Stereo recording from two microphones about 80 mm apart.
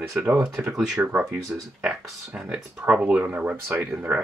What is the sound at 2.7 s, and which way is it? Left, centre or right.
Speech, centre.